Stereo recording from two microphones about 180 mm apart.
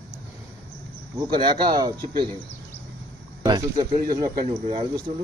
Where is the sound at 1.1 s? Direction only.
20° right (ahead or behind).